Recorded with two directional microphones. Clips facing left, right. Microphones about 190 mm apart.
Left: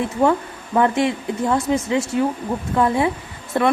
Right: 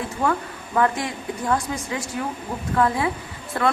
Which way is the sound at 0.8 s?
25° left (ahead or behind).